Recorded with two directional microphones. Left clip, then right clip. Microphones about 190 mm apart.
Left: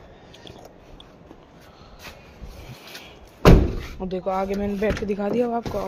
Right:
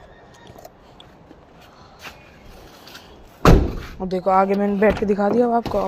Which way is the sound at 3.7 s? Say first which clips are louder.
Right 4 dB; 15° right (ahead or behind).